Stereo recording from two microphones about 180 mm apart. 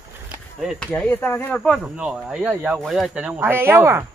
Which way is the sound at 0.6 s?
Centre (ahead or behind).